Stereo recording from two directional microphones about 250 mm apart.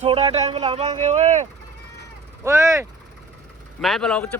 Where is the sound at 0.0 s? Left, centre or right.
Right.